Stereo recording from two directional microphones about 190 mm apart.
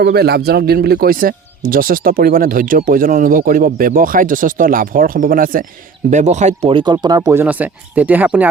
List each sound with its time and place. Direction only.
0.0 s speech: 55° right (ahead or behind); by 8.4 s 10° right (ahead or behind)